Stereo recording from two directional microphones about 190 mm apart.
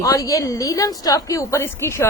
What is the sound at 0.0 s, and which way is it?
A woman's voice, 15° left (ahead or behind).